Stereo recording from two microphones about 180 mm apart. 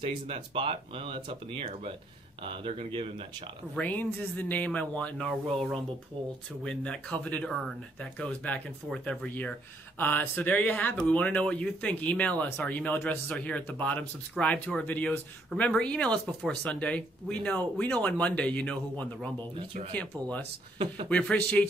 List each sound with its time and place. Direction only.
0.0 s speech: 30° right (ahead or behind)
3.7 s speech: 10° left (ahead or behind)
20.7 s speech: 30° right (ahead or behind)
21.1 s speech: 5° left (ahead or behind)